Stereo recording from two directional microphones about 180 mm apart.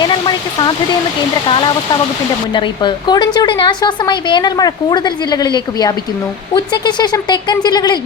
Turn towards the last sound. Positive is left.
turn(degrees=25)  # may be behind; listen again after turning